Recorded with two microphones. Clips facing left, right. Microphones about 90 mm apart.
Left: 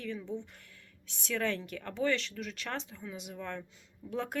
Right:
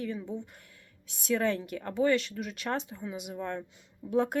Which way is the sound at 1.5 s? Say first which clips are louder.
Right 5 dB; 10° right (ahead or behind).